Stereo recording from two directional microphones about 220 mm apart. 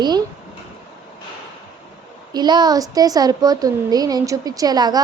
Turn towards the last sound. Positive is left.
turn(degrees=-20)  # may be behind; listen again after turning